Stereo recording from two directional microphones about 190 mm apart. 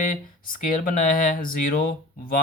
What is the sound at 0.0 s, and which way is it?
Speech, 45° left (ahead or behind).